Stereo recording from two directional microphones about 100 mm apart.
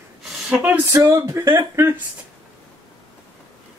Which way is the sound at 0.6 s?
25° right (ahead or behind).